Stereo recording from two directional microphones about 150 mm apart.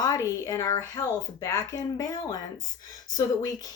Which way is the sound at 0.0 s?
25° left (ahead or behind).